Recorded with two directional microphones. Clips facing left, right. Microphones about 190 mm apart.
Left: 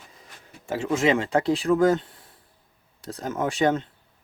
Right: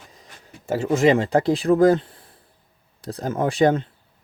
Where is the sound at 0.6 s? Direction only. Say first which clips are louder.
Right 5 dB; 40° right (ahead or behind).